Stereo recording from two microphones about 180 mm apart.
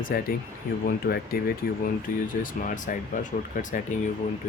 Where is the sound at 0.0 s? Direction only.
55° left (ahead or behind).